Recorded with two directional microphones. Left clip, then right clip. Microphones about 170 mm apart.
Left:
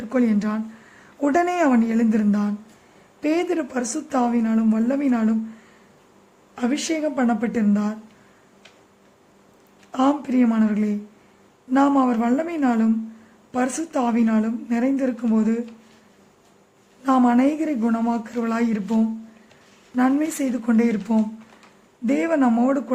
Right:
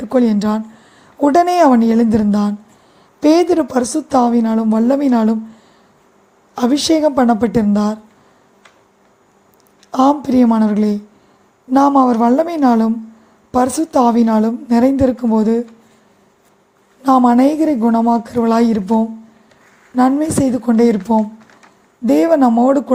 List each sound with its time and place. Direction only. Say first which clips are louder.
0.1 s speech: right 8 dB; 25° right (ahead or behind)
6.6 s speech: right 10 dB; 25° right (ahead or behind)
10.1 s speech: right 7 dB; 25° right (ahead or behind)
17.0 s a woman's voice: right 8 dB; 5° right (ahead or behind)
17.2 s speech: right 8 dB; 25° right (ahead or behind)
20.0 s speech: right 7 dB; 20° right (ahead or behind)
22.0 s speech: right 9 dB; 25° right (ahead or behind)